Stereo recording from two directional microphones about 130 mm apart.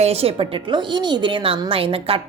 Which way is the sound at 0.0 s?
50° right (ahead or behind).